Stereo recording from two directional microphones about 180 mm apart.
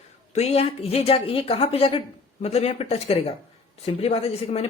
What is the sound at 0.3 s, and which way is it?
Speech, 35° left (ahead or behind).